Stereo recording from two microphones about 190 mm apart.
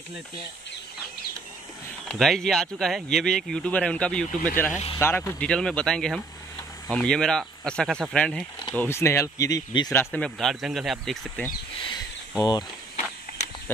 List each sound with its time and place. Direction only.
2.0 s speech: centre (ahead or behind); by 9.8 s 20° left (ahead or behind)
9.8 s speech: 5° left (ahead or behind)
12.4 s speech: 20° left (ahead or behind)